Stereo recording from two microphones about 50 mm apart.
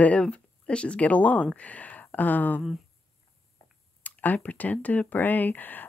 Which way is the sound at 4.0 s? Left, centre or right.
Left.